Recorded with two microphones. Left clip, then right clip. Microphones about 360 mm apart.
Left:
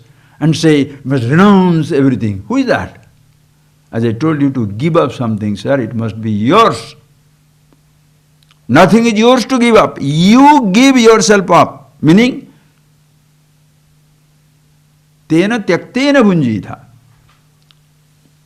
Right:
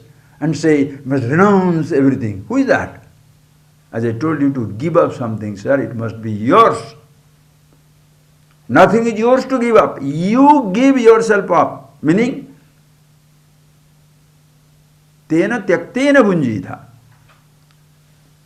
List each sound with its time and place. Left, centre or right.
0.3 s speech: left
3.9 s speech: left
8.7 s speech: left
15.3 s speech: left